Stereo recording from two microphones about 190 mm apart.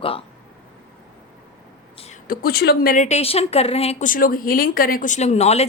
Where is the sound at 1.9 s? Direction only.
35° left (ahead or behind).